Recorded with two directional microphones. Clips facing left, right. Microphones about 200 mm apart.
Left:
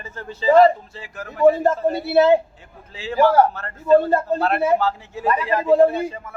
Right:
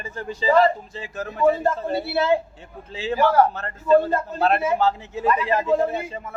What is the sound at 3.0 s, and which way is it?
A man's voice, 20° right (ahead or behind).